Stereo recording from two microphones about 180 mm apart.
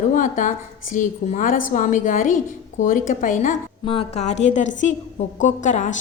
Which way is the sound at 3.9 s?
35° left (ahead or behind).